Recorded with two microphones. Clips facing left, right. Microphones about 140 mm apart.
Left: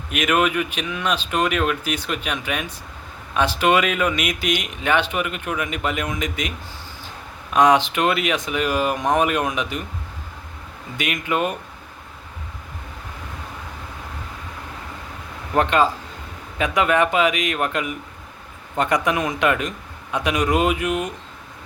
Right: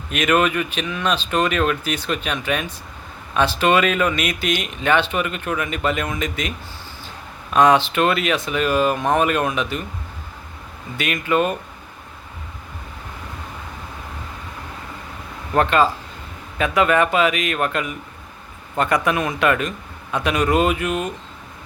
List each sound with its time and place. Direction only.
0.1 s speech: 10° left (ahead or behind)
7.5 s speech: 15° left (ahead or behind)
10.9 s speech: 15° left (ahead or behind)
15.5 s speech: 15° left (ahead or behind)